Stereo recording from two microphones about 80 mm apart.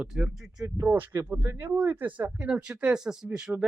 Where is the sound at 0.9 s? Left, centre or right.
Right.